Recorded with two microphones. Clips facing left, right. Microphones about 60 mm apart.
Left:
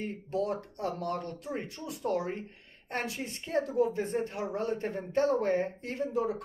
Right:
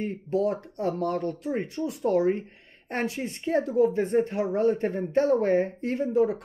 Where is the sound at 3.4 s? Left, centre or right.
Right.